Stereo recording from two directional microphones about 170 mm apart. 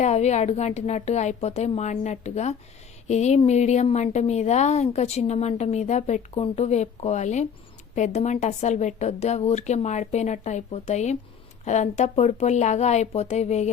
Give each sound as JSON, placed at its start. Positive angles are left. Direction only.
{"t": 0.0, "sound": "a woman's voice", "side_deg": 40}